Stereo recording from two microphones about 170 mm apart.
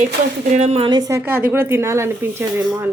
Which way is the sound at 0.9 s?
20° right (ahead or behind).